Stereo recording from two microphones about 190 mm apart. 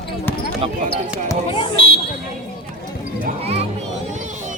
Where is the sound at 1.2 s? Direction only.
25° left (ahead or behind).